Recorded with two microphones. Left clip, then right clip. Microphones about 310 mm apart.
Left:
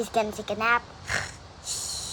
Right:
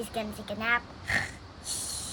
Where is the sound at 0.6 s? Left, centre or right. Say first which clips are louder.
Left 4 dB; centre.